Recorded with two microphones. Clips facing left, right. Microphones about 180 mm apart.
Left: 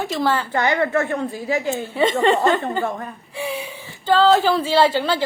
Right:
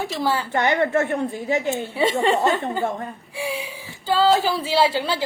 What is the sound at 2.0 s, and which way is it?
Speech, 10° right (ahead or behind).